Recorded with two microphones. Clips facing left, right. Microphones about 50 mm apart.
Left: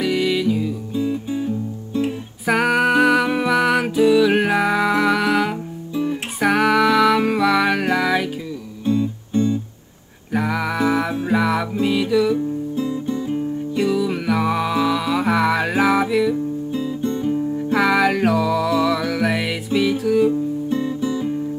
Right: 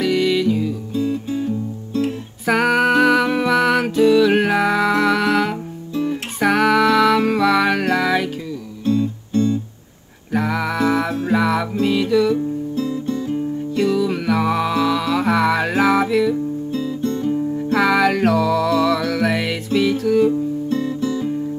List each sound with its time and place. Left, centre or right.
0.0 s music: centre
0.9 s music: centre
8.8 s music: centre
10.3 s music: centre
12.7 s music: centre
16.7 s guitar: centre
17.6 s music: centre
20.7 s guitar: centre